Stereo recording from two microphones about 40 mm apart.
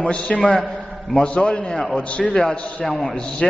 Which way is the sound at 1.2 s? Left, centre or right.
Left.